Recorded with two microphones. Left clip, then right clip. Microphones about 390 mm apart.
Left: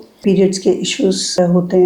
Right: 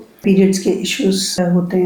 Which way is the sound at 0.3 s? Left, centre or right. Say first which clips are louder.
Left 1 dB; left.